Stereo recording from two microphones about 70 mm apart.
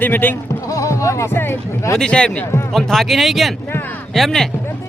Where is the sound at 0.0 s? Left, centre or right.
Left.